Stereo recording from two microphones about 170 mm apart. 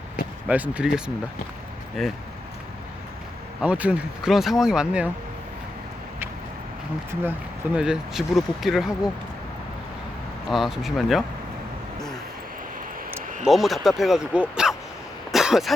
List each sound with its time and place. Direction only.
0.4 s speech: 10° right (ahead or behind)
3.6 s speech: 10° right (ahead or behind)
7.1 s speech: 10° right (ahead or behind)
10.5 s speech: centre (ahead or behind)
13.4 s speech: centre (ahead or behind)
14.5 s a sound: 5° right (ahead or behind)
15.3 s throat clearing: centre (ahead or behind)